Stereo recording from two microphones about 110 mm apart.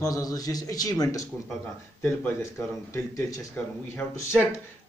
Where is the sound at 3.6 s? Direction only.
15° left (ahead or behind).